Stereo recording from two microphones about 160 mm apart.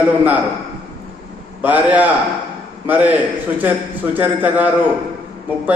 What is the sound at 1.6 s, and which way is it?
A man's voice, 10° right (ahead or behind).